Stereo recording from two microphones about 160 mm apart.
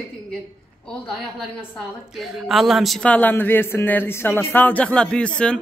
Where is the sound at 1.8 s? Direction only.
Centre (ahead or behind).